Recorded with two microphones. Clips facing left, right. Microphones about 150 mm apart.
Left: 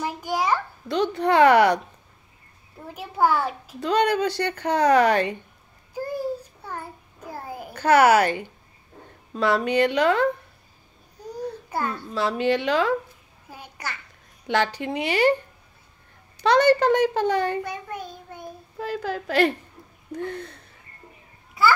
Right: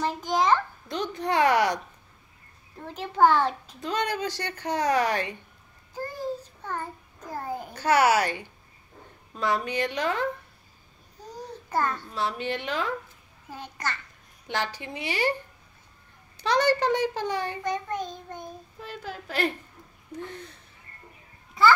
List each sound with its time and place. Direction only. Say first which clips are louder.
0.0 s a sound: right 1 dB; 10° left (ahead or behind)
1.1 s a woman's voice: left 6 dB; 65° left (ahead or behind)
2.9 s child singing: right 1 dB; 10° left (ahead or behind)
3.8 s a woman's voice: left 7 dB; 65° left (ahead or behind)
5.9 s a sound: left 4 dB; 10° left (ahead or behind)
7.7 s a woman's voice: left 5 dB; 55° left (ahead or behind)
9.4 s speech: left 6 dB; 70° left (ahead or behind)
11.2 s babbling: left 7 dB; 10° left (ahead or behind)
12.2 s a woman's voice: left 8 dB; 90° left
13.5 s a child's voice: right 2 dB; 10° left (ahead or behind)
14.5 s a woman's voice: left 8 dB; 70° left (ahead or behind)
16.4 s a woman's voice: left 6 dB; 60° left (ahead or behind)
17.6 s child singing: right 3 dB; 10° left (ahead or behind)
18.8 s a woman's voice: left 11 dB; 90° left